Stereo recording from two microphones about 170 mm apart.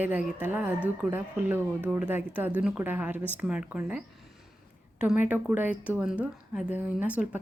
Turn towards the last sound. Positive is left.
turn(degrees=-10)  # may be behind; listen again after turning